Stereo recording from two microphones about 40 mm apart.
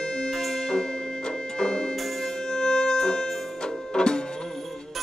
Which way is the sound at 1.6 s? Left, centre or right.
Left.